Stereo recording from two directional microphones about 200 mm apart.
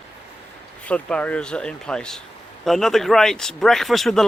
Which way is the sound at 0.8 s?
5° left (ahead or behind).